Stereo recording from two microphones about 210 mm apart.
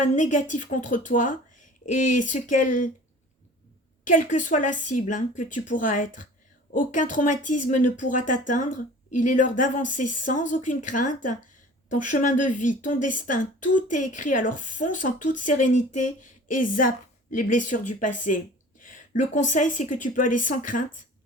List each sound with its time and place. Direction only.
0.0 s speech: 35° left (ahead or behind)
4.0 s speech: 40° left (ahead or behind)